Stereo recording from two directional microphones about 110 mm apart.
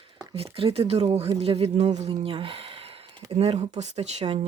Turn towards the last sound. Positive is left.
turn(degrees=-70)  # may be behind; listen again after turning